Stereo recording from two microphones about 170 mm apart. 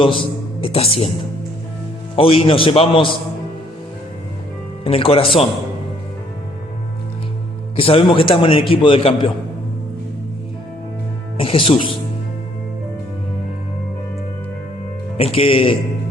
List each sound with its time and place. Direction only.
0.0 s a man's voice: 30° left (ahead or behind)
2.1 s a man's voice: 35° left (ahead or behind)
4.8 s a man's voice: 35° left (ahead or behind)
7.8 s a man's voice: 35° left (ahead or behind)
11.3 s a man's voice: 30° left (ahead or behind)
15.2 s a man's voice: 35° left (ahead or behind)